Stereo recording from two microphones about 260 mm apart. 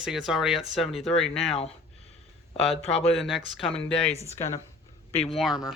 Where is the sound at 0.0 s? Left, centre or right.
Centre.